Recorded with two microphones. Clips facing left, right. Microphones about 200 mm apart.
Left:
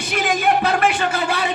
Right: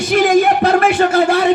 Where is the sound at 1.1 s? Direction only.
65° right (ahead or behind).